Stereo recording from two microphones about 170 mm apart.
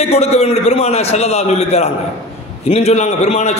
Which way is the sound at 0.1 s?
40° left (ahead or behind).